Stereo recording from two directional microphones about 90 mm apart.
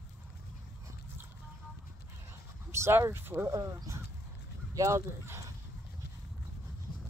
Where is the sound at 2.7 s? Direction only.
30° right (ahead or behind).